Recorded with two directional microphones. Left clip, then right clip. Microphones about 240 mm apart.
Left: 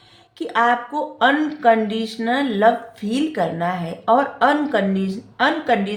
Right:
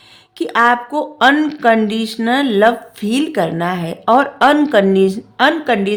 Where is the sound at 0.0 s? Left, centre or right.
Right.